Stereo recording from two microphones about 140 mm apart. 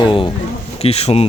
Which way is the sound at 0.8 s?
45° left (ahead or behind).